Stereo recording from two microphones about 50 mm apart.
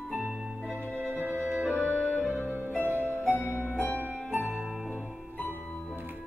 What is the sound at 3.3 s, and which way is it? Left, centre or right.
Music, left.